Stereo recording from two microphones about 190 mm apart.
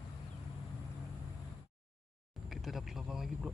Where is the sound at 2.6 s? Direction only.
Centre (ahead or behind).